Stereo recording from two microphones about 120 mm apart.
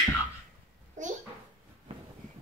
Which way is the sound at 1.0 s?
90° right.